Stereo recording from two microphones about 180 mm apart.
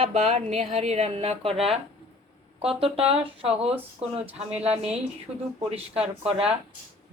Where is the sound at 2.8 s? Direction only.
30° right (ahead or behind).